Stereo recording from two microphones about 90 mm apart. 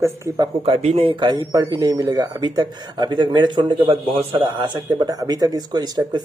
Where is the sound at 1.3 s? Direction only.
45° right (ahead or behind).